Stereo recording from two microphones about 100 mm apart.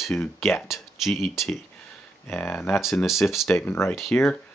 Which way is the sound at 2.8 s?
Centre (ahead or behind).